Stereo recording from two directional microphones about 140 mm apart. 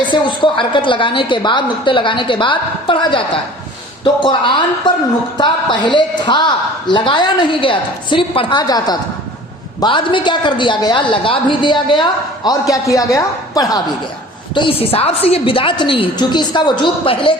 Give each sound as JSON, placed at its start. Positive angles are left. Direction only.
{"t": 0.1, "sound": "a woman's voice", "side_deg": 35}
{"t": 14.5, "sound": "a woman's voice", "side_deg": 40}